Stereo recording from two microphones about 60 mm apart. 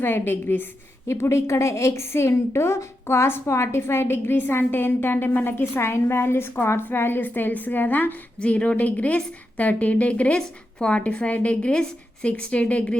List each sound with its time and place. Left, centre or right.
0.0 s a woman's voice: left
1.0 s a woman's voice: left
8.4 s a woman's voice: left